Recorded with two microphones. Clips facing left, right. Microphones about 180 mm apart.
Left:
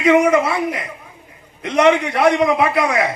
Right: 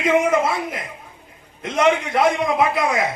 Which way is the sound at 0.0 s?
70° left (ahead or behind).